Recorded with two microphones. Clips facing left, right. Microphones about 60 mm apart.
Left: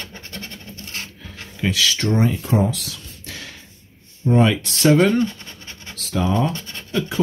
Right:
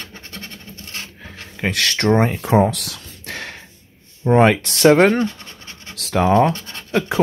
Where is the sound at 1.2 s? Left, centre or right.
Right.